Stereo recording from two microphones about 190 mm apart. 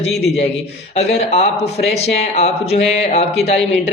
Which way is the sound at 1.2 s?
30° left (ahead or behind).